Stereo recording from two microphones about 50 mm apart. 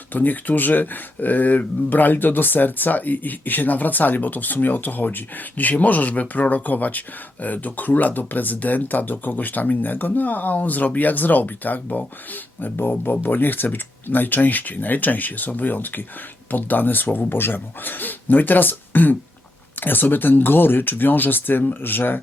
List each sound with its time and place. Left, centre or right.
0.1 s speech: left